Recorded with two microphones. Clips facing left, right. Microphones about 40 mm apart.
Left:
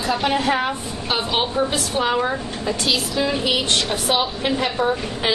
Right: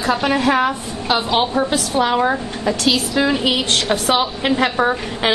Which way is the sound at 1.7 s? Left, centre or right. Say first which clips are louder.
Right 4 dB; right.